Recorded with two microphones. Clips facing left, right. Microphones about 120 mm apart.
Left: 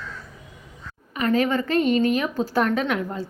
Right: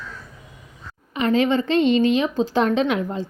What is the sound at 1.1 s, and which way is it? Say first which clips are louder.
A woman's voice: right 2 dB; 25° right (ahead or behind).